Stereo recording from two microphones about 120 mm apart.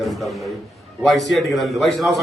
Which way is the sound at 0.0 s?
Centre (ahead or behind).